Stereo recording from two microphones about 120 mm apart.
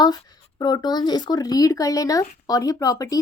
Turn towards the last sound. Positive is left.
turn(degrees=30)  # may be behind; listen again after turning